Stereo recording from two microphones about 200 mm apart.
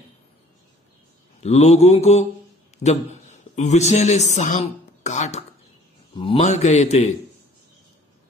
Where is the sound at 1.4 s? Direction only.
35° left (ahead or behind).